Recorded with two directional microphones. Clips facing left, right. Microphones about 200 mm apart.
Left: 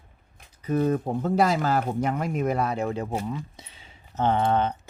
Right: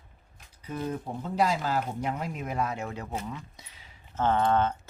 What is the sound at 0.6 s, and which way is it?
Speech, 60° left (ahead or behind).